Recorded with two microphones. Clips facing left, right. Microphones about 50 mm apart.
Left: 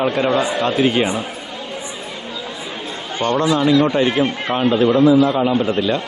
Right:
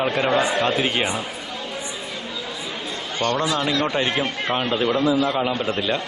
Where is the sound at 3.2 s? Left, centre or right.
Centre.